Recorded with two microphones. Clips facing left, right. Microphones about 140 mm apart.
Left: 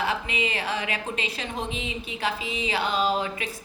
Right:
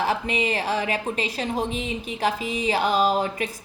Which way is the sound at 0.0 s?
40° right (ahead or behind).